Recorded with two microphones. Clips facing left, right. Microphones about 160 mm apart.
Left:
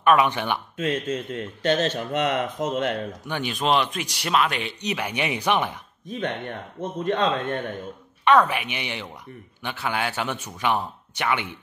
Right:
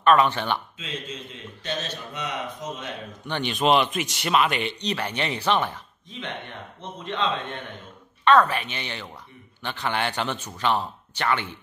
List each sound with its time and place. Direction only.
0.0 s speech: 10° left (ahead or behind)
0.7 s speech: 55° left (ahead or behind)
3.3 s speech: 5° left (ahead or behind)
4.8 s speech: 10° left (ahead or behind)
6.8 s speech: 50° left (ahead or behind)
8.3 s speech: 15° left (ahead or behind)